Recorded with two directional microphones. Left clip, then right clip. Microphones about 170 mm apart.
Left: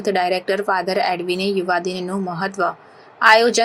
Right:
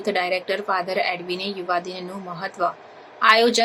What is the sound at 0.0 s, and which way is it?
A woman's voice, 20° left (ahead or behind).